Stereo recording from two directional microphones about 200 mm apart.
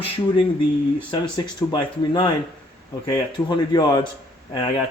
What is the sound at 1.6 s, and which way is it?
Speech, 15° left (ahead or behind).